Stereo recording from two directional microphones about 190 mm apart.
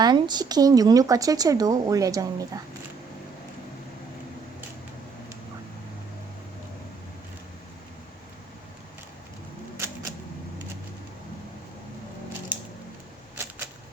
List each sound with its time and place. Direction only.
0.0 s speech: 20° right (ahead or behind)